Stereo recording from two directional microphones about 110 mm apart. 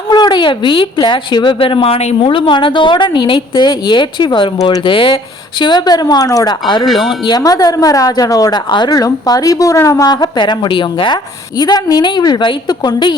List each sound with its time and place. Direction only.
0.1 s a woman's voice: 40° left (ahead or behind); by 2.1 s 65° left (ahead or behind)
2.2 s a woman's voice: 50° left (ahead or behind)